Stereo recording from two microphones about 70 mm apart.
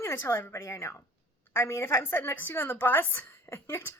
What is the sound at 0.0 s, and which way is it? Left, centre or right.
A woman's voice, left.